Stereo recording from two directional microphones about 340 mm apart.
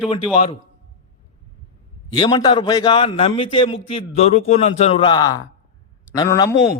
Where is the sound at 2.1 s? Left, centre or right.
Centre.